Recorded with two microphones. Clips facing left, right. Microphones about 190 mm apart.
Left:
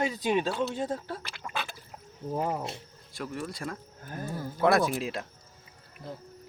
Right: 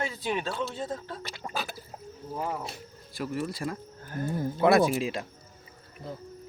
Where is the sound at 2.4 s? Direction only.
25° left (ahead or behind).